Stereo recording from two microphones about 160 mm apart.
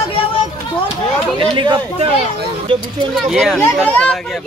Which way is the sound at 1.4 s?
35° right (ahead or behind).